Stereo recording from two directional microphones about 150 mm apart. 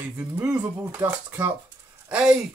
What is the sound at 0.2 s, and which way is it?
Speech, 10° right (ahead or behind).